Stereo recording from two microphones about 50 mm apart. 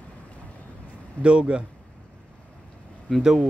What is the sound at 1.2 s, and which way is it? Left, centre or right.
Speech, right.